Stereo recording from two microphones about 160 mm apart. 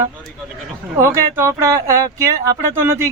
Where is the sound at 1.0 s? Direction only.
15° right (ahead or behind).